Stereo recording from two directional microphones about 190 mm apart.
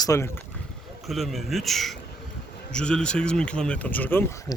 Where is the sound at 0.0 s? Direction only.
15° left (ahead or behind).